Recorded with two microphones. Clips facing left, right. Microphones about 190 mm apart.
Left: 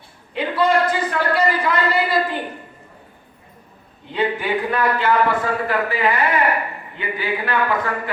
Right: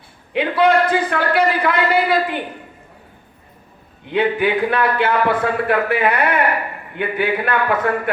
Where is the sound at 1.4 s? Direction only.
65° right (ahead or behind).